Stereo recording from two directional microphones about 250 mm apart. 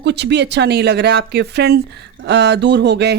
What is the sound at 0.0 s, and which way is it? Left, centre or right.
Speech, right.